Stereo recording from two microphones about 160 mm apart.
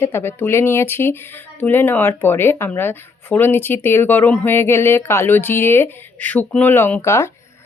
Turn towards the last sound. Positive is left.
turn(degrees=15)  # may be behind; listen again after turning